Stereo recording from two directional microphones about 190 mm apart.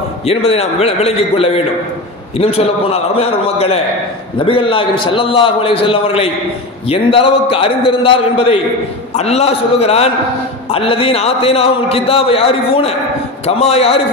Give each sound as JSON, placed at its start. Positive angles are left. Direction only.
{"t": 0.3, "sound": "a man's voice", "side_deg": 30}